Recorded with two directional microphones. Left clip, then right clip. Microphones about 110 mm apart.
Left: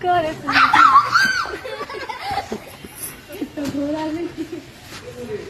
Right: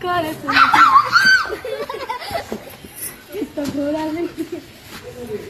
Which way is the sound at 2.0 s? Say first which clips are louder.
Right 1 dB; centre (ahead or behind).